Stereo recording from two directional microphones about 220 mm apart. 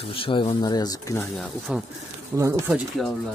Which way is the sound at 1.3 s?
Centre (ahead or behind).